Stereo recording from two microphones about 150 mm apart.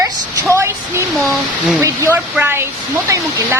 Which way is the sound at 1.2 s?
Centre (ahead or behind).